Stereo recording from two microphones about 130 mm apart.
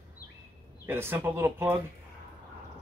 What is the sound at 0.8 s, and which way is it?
Speech, 15° right (ahead or behind).